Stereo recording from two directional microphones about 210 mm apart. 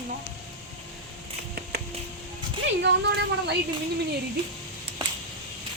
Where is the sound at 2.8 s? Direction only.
55° right (ahead or behind).